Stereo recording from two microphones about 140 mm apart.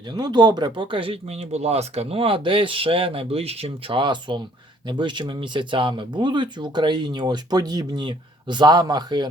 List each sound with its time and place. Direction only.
0.1 s speech: 30° right (ahead or behind)